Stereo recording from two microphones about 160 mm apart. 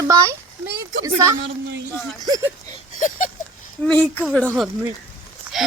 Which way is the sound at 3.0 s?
50° left (ahead or behind).